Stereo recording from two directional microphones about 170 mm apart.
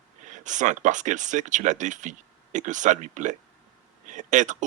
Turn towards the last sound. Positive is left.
turn(degrees=-45)  # may be behind; listen again after turning